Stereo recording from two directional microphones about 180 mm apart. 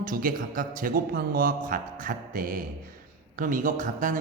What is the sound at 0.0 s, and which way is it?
A man's voice, 50° right (ahead or behind).